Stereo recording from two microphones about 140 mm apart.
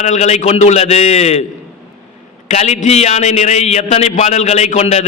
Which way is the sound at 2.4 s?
50° left (ahead or behind).